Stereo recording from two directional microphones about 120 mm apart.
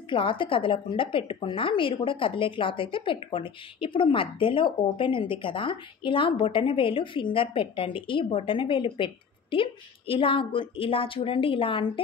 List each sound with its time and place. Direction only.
0.1 s a woman's voice: 45° left (ahead or behind)